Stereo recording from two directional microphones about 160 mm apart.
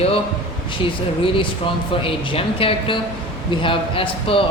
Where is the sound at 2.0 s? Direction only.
35° left (ahead or behind).